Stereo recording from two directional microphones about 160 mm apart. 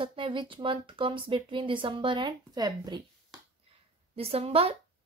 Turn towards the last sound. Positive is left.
turn(degrees=-40)  # may be behind; listen again after turning